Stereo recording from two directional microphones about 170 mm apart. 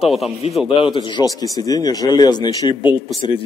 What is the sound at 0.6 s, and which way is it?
A man's voice, 30° left (ahead or behind).